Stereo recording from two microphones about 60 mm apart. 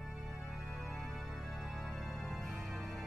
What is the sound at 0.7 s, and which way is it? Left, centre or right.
Music, centre.